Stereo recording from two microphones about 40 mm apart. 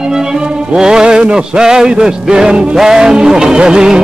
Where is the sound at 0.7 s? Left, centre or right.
Centre.